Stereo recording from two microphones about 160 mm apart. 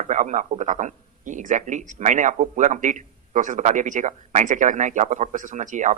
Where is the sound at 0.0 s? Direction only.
50° right (ahead or behind).